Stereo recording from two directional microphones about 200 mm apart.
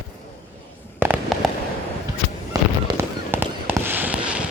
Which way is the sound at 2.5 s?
15° right (ahead or behind).